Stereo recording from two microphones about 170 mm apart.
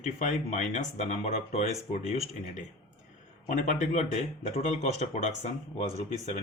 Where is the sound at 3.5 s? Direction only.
45° left (ahead or behind).